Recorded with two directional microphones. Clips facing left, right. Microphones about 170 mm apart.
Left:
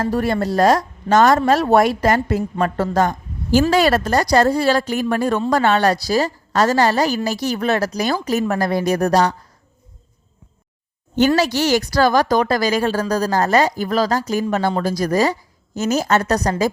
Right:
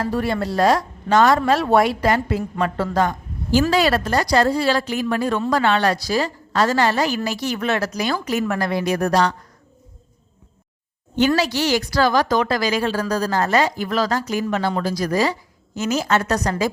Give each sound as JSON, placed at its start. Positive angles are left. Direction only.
{"t": 0.0, "sound": "a woman's voice", "side_deg": 45}
{"t": 11.3, "sound": "a woman's voice", "side_deg": 45}